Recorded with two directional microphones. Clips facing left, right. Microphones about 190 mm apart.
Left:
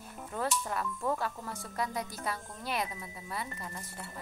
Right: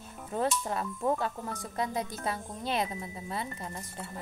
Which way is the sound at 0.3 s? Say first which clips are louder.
Right 4 dB; 25° right (ahead or behind).